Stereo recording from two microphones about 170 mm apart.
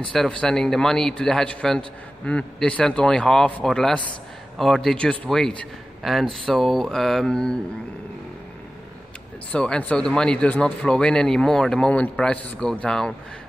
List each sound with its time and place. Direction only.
0.1 s a man's voice: 5° left (ahead or behind)
9.5 s a man's voice: 5° left (ahead or behind)